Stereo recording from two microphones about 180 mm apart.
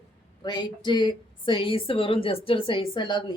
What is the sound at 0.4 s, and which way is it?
Speech, 25° left (ahead or behind).